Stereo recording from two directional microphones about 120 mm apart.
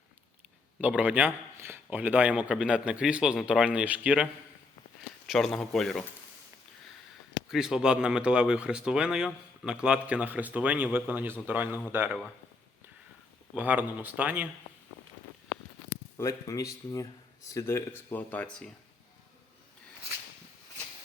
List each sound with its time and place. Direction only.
0.8 s speech: 10° right (ahead or behind)
5.2 s speech: 5° left (ahead or behind)
7.4 s speech: 5° right (ahead or behind)
13.5 s speech: 15° right (ahead or behind)
15.9 s a sound: 25° left (ahead or behind)
17.5 s speech: 25° left (ahead or behind)